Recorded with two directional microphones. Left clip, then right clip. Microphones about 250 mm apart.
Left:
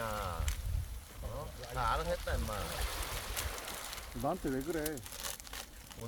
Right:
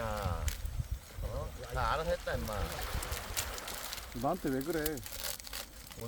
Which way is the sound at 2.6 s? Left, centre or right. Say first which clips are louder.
Even; left.